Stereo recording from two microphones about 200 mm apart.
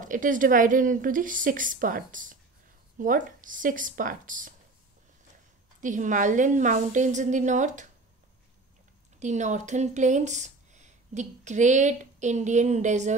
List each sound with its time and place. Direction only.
0.0 s a woman's voice: 40° right (ahead or behind)
5.8 s a woman's voice: 40° right (ahead or behind)
9.2 s speech: 35° right (ahead or behind)